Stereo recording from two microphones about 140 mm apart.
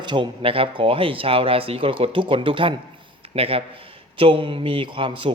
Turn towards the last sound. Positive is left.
turn(degrees=-35)  # may be behind; listen again after turning